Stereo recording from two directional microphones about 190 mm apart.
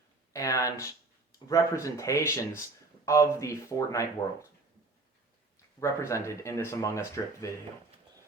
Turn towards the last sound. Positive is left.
turn(degrees=15)  # may be behind; listen again after turning